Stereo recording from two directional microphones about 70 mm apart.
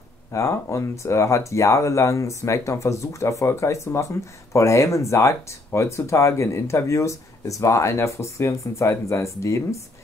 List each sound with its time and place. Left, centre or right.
0.3 s speech: left